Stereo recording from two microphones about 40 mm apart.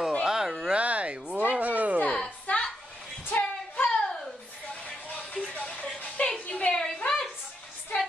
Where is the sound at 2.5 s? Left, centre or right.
Left.